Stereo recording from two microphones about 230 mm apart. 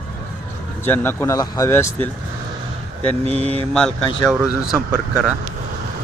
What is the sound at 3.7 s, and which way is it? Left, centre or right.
Speech, centre.